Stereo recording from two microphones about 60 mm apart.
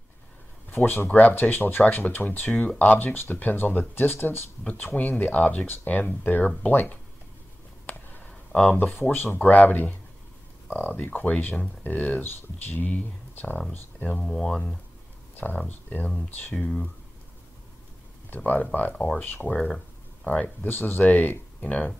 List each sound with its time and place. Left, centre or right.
0.7 s speech: left
7.8 s a sound: left
8.2 s a sound: centre
8.7 s speech: left
14.1 s speech: centre
15.3 s speech: left
18.4 s speech: left